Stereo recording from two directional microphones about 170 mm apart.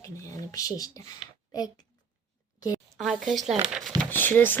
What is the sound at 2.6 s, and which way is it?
Speech, 20° left (ahead or behind).